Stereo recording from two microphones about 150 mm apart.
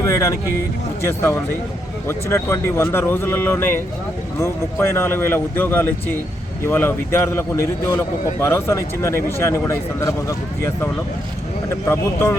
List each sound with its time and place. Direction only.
0.0 s a man's voice: 20° left (ahead or behind)
11.7 s a man's voice: 15° left (ahead or behind)